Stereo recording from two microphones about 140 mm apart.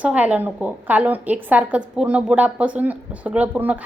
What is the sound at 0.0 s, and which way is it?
A woman's voice, 10° right (ahead or behind).